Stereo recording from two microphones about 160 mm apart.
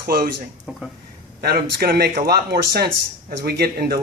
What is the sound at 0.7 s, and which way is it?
Speech, 5° right (ahead or behind).